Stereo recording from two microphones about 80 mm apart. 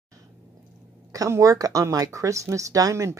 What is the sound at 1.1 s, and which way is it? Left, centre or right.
Speech, right.